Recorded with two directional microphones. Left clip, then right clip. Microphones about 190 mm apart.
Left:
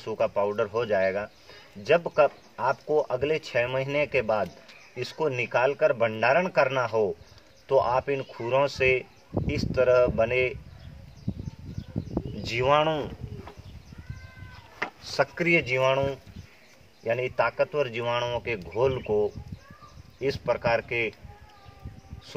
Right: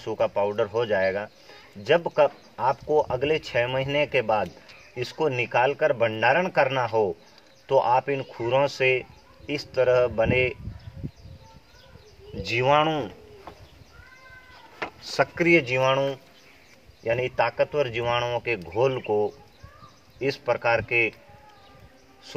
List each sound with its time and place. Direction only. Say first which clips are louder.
0.0 s speech: right 2 dB; 15° right (ahead or behind)
12.4 s speech: right 2 dB; 20° right (ahead or behind)
15.0 s speech: right 3 dB; 20° right (ahead or behind)